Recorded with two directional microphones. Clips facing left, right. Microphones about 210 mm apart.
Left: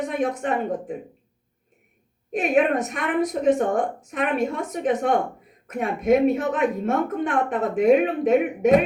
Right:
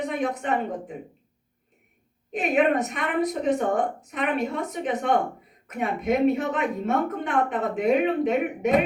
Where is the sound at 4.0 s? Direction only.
45° left (ahead or behind).